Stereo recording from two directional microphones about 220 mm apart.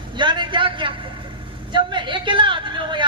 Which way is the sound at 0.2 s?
20° right (ahead or behind).